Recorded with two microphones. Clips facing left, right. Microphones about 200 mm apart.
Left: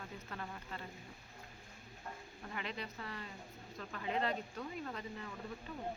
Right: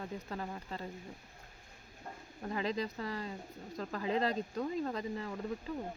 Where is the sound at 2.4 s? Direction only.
35° right (ahead or behind).